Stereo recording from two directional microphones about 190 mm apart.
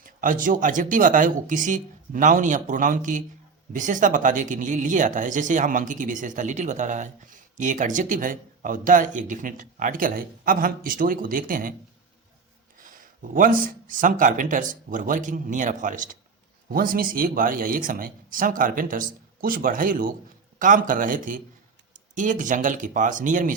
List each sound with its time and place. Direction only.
0.0 s speech: 45° right (ahead or behind)
12.8 s speech: 45° right (ahead or behind)